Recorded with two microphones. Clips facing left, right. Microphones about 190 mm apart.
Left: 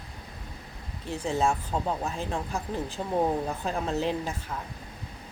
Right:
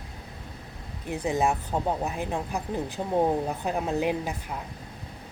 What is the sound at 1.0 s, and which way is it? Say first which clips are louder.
Speech: right 1 dB; 15° right (ahead or behind).